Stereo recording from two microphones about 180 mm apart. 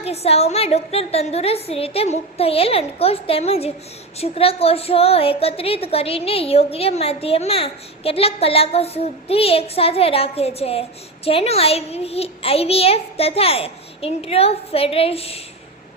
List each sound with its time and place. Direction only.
0.0 s a woman's voice: 35° left (ahead or behind)